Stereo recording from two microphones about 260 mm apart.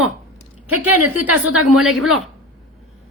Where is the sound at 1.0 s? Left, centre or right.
Right.